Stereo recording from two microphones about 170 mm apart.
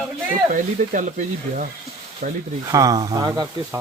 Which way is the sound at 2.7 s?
20° right (ahead or behind).